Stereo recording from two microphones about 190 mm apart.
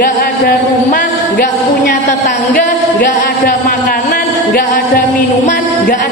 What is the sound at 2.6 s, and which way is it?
A man's voice, 45° left (ahead or behind).